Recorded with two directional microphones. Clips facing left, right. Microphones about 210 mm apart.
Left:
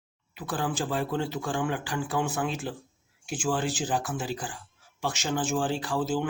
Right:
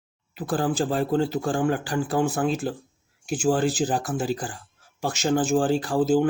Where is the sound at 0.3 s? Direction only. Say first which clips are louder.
Right 6 dB; 35° right (ahead or behind).